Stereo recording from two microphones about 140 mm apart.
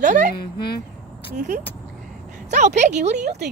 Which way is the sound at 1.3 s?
60° right (ahead or behind).